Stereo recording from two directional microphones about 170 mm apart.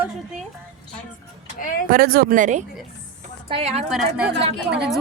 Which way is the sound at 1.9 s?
65° right (ahead or behind).